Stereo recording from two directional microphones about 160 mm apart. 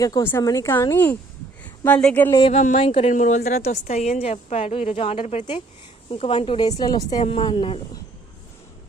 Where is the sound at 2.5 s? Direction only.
45° left (ahead or behind).